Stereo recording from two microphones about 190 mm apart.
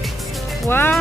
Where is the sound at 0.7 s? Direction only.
10° left (ahead or behind).